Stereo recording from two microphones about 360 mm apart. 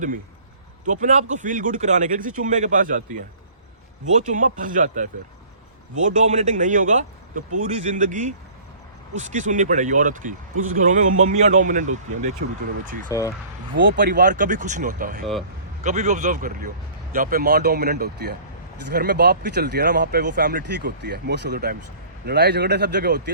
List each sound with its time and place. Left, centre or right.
0.9 s speech: centre
4.2 s speech: right
6.1 s speech: centre
13.1 s speech: centre
13.7 s speech: right